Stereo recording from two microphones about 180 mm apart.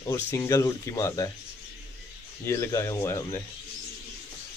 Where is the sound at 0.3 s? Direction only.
15° left (ahead or behind).